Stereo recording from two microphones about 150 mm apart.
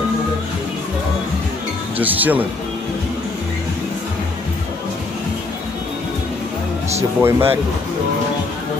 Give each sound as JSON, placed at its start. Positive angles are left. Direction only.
{"t": 2.0, "sound": "speech", "side_deg": -10}
{"t": 7.2, "sound": "speech", "side_deg": -15}